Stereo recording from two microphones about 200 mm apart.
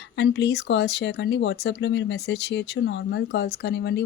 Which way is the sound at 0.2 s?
60° left (ahead or behind).